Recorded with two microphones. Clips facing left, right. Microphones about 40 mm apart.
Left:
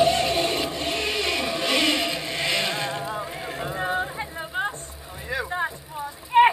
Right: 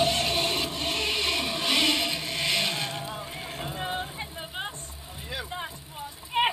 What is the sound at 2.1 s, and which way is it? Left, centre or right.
Music, left.